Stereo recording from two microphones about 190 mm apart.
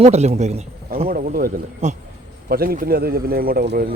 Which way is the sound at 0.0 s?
35° right (ahead or behind).